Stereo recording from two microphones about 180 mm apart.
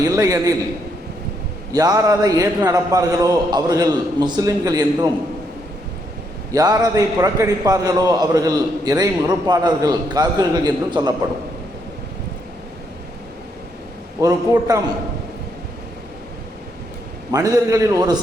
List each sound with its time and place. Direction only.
0.2 s a man's voice: 20° right (ahead or behind)
1.7 s a man's voice: 20° right (ahead or behind)
6.5 s a man's voice: 20° right (ahead or behind)
14.2 s a man's voice: 20° right (ahead or behind)
17.3 s a man's voice: 20° right (ahead or behind)